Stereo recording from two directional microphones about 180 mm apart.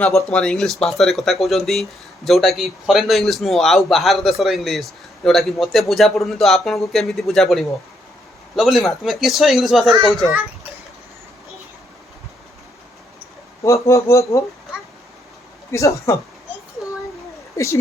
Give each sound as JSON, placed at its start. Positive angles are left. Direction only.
{"t": 0.3, "sound": "speech", "side_deg": 5}
{"t": 13.8, "sound": "speech", "side_deg": 15}
{"t": 15.7, "sound": "speech", "side_deg": 15}
{"t": 17.6, "sound": "speech", "side_deg": 15}